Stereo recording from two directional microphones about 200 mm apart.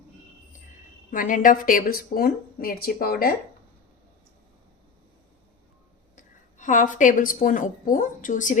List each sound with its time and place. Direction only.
1.1 s a woman's voice: 40° left (ahead or behind)
6.1 s a woman's voice: 40° left (ahead or behind)